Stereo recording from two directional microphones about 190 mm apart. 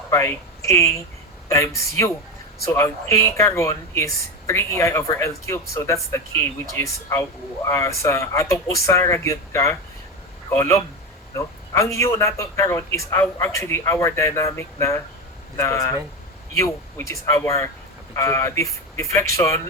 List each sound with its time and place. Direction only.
0.1 s speech: 15° left (ahead or behind)
11.3 s speech: 15° left (ahead or behind)